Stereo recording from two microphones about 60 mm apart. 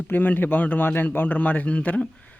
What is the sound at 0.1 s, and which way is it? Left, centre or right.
A man's voice, left.